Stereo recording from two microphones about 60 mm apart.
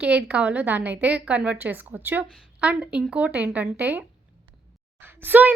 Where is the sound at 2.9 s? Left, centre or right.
Centre.